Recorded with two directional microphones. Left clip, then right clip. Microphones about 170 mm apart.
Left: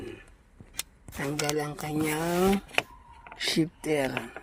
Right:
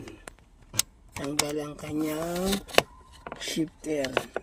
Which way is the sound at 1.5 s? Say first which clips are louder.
Left 3 dB; 20° left (ahead or behind).